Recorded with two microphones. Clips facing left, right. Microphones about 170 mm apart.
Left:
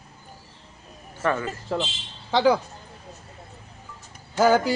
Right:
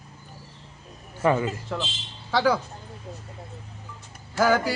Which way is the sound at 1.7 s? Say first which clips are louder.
Left 4 dB; 30° left (ahead or behind).